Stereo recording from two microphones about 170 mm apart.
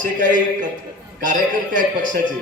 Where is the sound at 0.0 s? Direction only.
50° right (ahead or behind).